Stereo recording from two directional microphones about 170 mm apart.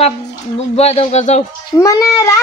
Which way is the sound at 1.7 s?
20° left (ahead or behind).